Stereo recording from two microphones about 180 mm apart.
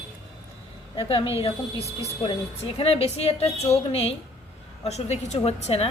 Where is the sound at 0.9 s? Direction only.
30° left (ahead or behind).